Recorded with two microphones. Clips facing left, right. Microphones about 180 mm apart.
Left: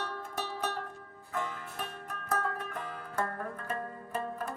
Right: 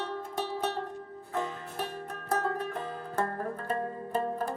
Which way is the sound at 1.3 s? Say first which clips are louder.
Right 3 dB; 30° right (ahead or behind).